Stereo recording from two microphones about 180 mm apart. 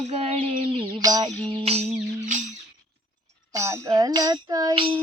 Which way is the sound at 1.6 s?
35° right (ahead or behind).